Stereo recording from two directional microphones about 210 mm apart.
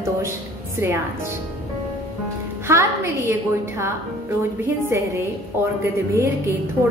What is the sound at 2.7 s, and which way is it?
Speech, 15° right (ahead or behind).